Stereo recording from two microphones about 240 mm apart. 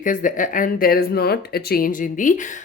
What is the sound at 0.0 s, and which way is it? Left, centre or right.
A woman's voice, left.